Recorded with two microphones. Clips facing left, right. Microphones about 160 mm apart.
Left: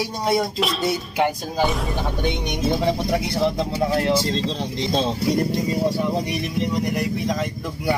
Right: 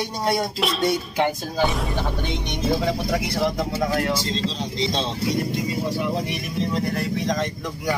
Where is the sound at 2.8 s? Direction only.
25° left (ahead or behind).